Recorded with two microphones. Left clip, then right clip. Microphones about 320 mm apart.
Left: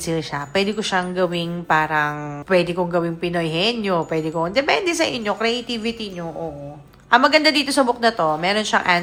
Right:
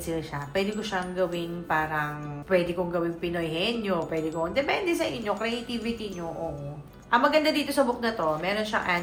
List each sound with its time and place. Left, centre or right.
0.1 s a woman's voice: left
7.1 s a woman's voice: left